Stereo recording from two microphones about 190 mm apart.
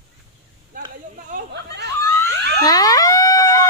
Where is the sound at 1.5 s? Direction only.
65° right (ahead or behind).